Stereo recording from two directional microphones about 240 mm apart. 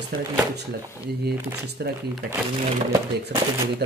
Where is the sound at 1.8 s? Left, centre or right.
Right.